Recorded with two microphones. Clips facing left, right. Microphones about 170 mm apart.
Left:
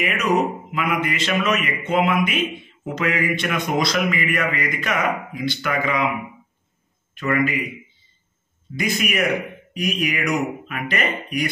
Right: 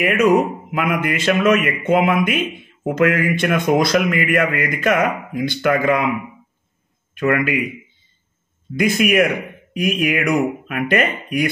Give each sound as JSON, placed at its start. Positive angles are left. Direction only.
{"t": 0.0, "sound": "a man's voice", "side_deg": -50}
{"t": 8.7, "sound": "a man's voice", "side_deg": -50}